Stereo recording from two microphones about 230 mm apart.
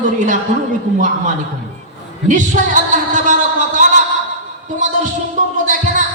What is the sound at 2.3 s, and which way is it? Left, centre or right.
A woman's voice, right.